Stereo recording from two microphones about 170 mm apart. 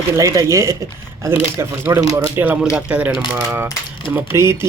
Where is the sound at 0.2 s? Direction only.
20° right (ahead or behind).